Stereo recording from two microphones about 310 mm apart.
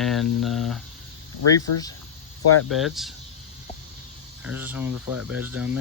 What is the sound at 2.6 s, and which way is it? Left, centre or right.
Speech, centre.